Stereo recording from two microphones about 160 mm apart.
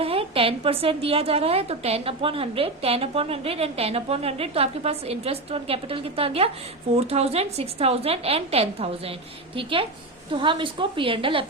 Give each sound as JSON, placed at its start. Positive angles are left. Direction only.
{"t": 0.0, "sound": "a woman's voice", "side_deg": -35}